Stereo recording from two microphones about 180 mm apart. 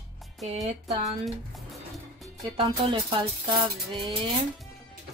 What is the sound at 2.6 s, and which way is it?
Music, 30° right (ahead or behind).